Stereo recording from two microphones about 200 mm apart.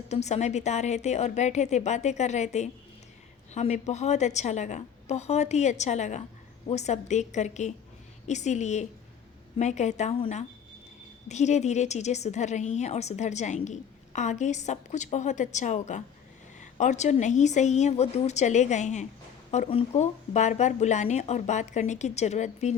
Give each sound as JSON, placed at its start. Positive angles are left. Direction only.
{"t": 0.1, "sound": "a woman's voice", "side_deg": 35}